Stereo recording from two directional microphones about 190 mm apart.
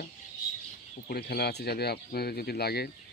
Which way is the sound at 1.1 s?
55° left (ahead or behind).